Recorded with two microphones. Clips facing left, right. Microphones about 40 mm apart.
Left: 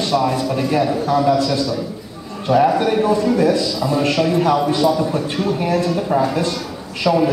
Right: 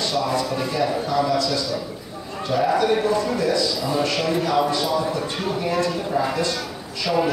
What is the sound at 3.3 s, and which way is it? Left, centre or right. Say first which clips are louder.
Speech: left 5 dB; left.